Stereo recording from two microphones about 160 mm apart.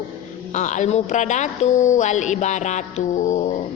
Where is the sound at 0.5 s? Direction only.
45° left (ahead or behind).